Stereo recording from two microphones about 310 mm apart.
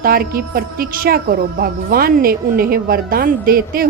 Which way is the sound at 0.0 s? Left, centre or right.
Right.